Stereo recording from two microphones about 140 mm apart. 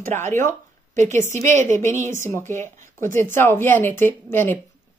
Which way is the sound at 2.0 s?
20° left (ahead or behind).